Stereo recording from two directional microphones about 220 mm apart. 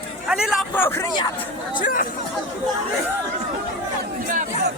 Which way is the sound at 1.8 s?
40° left (ahead or behind).